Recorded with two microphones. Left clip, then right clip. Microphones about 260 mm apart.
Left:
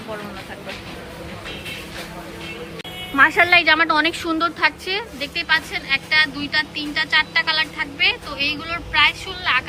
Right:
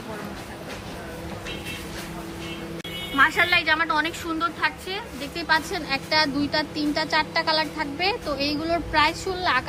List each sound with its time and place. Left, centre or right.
3.2 s a woman's voice: centre